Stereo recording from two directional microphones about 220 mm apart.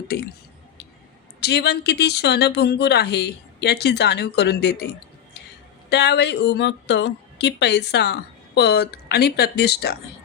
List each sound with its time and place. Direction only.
1.4 s a woman's voice: 50° left (ahead or behind)
5.9 s a woman's voice: 50° left (ahead or behind)